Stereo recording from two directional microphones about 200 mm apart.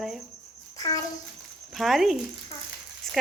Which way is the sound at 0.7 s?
15° left (ahead or behind).